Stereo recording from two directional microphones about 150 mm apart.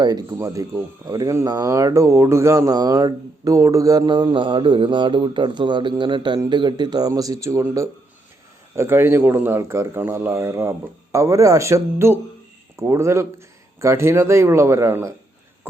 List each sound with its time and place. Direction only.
0.0 s speech: 25° right (ahead or behind)